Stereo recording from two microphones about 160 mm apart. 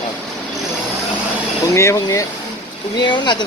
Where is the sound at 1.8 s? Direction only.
20° left (ahead or behind).